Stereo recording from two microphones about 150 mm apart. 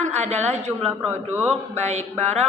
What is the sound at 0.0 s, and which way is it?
Speech, 50° right (ahead or behind).